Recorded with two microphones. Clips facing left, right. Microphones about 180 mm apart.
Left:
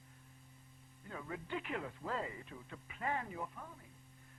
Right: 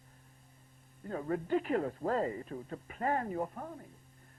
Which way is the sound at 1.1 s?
45° right (ahead or behind).